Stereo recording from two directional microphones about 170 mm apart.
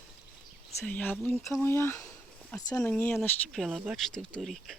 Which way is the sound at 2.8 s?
10° left (ahead or behind).